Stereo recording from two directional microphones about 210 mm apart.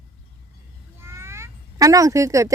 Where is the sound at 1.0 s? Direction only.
10° right (ahead or behind).